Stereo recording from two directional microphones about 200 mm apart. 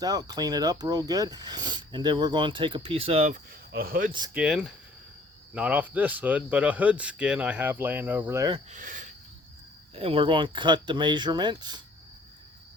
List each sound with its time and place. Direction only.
0.0 s speech: 20° right (ahead or behind)
3.7 s speech: 50° right (ahead or behind)
4.4 s speech: 5° right (ahead or behind)
8.7 s speech: 40° right (ahead or behind)
9.9 s speech: 30° right (ahead or behind)